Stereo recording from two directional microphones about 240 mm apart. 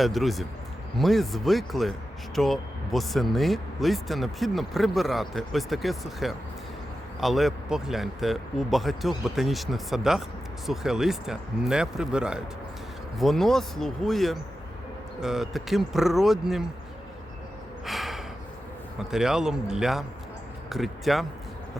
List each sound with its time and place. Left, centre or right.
0.0 s speech: centre
17.8 s gasp: centre
18.9 s speech: centre